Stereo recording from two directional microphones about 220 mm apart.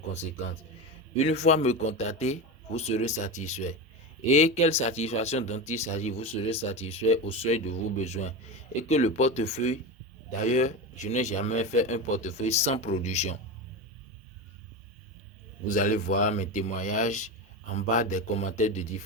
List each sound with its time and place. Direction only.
0.1 s speech: 30° left (ahead or behind)
15.7 s speech: 40° left (ahead or behind)